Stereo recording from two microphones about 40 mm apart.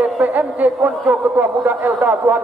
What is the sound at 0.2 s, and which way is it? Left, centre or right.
A man's voice, right.